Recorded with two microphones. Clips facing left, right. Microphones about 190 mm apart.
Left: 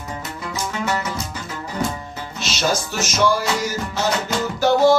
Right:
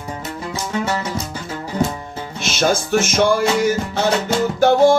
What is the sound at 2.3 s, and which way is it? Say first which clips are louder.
Music: right 4 dB; 55° right (ahead or behind).